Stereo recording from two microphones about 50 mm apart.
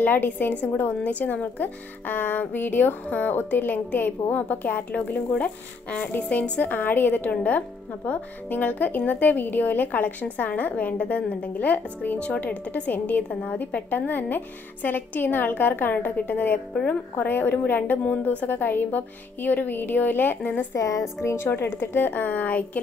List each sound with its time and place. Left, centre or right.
0.0 s speech: left
20.7 s speech: left
21.2 s a woman's voice: left
21.5 s speech: left